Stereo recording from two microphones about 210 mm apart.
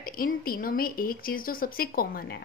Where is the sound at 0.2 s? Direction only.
45° left (ahead or behind).